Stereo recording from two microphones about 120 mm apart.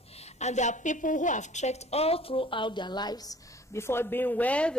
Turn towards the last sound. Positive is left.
turn(degrees=10)  # may be behind; listen again after turning